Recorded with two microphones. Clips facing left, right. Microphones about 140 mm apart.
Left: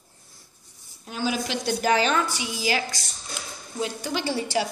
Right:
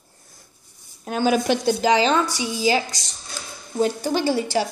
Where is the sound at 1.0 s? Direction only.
55° right (ahead or behind).